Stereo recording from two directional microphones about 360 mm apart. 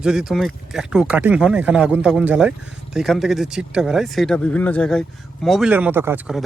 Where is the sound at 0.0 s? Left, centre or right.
Centre.